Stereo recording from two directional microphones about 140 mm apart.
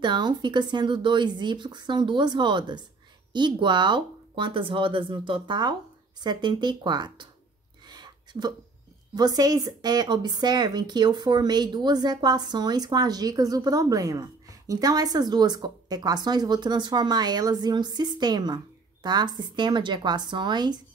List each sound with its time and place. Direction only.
0.0 s speech: 30° right (ahead or behind)
7.8 s a sound: 30° right (ahead or behind)
9.1 s speech: 30° right (ahead or behind)